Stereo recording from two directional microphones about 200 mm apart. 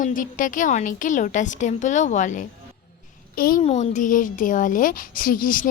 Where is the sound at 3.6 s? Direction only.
35° left (ahead or behind).